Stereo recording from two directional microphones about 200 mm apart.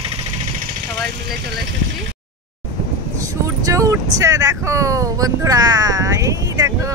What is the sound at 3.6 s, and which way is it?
Vehicle, 15° right (ahead or behind).